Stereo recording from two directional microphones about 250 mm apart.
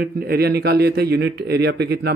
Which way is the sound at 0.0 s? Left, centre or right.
Right.